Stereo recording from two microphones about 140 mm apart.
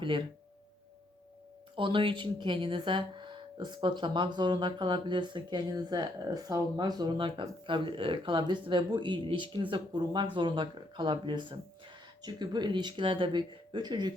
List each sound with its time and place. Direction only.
0.0 s speech: 35° right (ahead or behind)
1.7 s speech: 35° right (ahead or behind)